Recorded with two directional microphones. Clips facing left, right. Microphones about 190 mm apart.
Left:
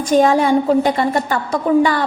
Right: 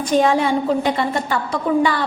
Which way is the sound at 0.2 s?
45° left (ahead or behind).